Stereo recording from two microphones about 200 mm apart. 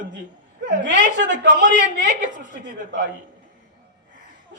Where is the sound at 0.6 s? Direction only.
60° right (ahead or behind).